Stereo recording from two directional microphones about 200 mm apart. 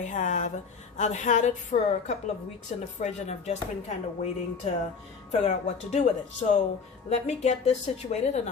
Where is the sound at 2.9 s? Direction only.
35° left (ahead or behind).